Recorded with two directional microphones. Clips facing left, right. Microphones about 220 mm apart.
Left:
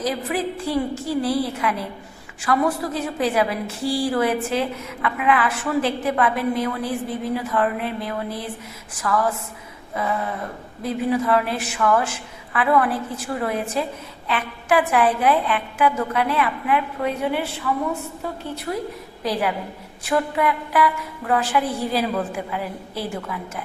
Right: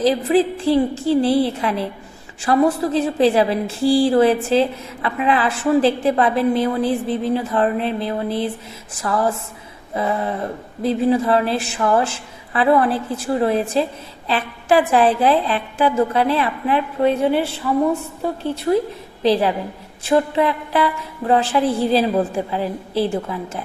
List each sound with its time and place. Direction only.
0.0 s a woman's voice: 30° right (ahead or behind)
18.5 s a woman's voice: 25° right (ahead or behind)